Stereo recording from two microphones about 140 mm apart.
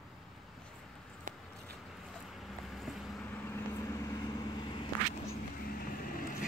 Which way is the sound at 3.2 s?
15° left (ahead or behind).